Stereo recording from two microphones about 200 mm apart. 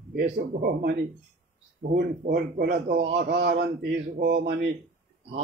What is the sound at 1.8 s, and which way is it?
Speech, 50° right (ahead or behind).